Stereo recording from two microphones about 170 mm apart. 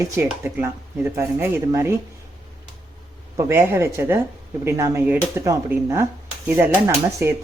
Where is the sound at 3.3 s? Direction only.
15° right (ahead or behind).